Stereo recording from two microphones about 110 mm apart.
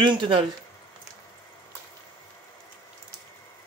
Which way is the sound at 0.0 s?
50° right (ahead or behind).